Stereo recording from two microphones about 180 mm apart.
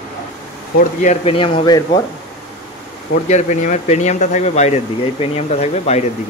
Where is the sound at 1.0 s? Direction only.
40° left (ahead or behind).